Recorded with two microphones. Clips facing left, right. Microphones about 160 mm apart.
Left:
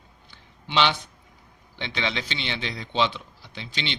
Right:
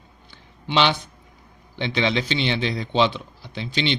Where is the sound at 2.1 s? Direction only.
15° right (ahead or behind).